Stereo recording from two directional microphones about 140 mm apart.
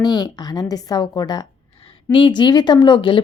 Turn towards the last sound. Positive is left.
turn(degrees=35)  # may be behind; listen again after turning